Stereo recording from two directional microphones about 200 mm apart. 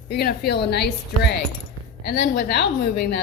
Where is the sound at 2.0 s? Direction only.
55° left (ahead or behind).